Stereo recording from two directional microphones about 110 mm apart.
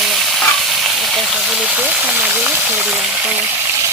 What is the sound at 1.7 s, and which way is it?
Speech, 15° right (ahead or behind).